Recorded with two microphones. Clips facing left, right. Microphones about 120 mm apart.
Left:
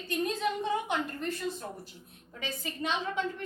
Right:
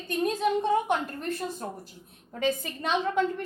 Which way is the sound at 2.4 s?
55° right (ahead or behind).